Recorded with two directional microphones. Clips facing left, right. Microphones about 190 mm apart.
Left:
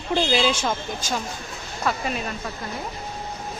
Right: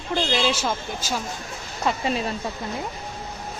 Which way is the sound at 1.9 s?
25° right (ahead or behind).